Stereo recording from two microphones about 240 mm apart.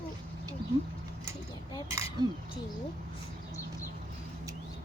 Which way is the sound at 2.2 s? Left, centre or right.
Centre.